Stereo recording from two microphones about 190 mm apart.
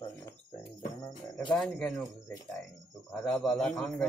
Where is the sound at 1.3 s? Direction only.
5° left (ahead or behind).